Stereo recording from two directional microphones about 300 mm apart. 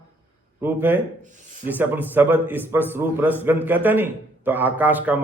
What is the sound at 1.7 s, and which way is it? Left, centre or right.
A man's voice, centre.